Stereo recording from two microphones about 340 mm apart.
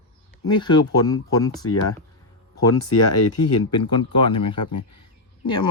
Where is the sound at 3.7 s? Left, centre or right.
Centre.